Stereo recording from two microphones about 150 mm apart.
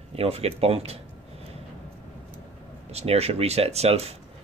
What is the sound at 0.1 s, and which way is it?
Speech, 40° right (ahead or behind).